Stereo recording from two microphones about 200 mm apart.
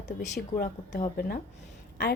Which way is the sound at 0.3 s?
45° left (ahead or behind).